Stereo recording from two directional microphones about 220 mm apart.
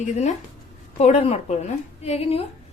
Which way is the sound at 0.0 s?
30° left (ahead or behind).